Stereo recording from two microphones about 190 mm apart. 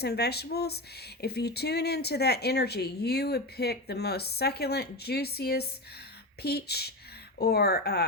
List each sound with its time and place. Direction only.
0.0 s speech: 60° left (ahead or behind)